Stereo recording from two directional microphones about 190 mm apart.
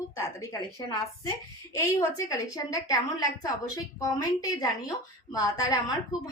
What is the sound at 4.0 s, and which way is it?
A woman's voice, 20° left (ahead or behind).